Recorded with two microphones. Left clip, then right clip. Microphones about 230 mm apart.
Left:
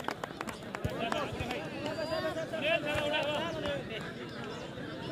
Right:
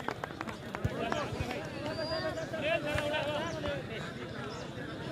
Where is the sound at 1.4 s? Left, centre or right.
Left.